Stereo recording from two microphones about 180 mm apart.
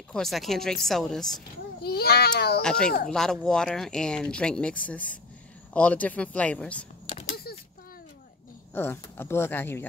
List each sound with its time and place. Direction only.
0.1 s speech: centre (ahead or behind)
1.8 s a child's voice: 60° left (ahead or behind)
2.6 s speech: 5° left (ahead or behind)
7.5 s a sound: 60° left (ahead or behind)
8.7 s speech: 15° left (ahead or behind)